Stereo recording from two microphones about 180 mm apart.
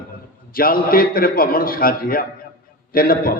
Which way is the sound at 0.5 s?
55° left (ahead or behind).